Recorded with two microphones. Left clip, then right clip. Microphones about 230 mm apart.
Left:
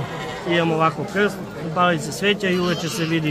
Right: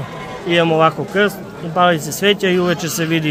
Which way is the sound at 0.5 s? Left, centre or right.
Right.